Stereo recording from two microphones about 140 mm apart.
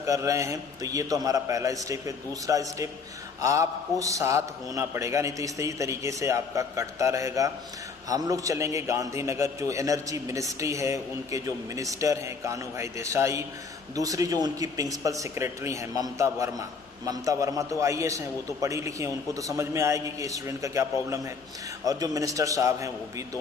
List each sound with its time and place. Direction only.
0.0 s a man's voice: 20° right (ahead or behind)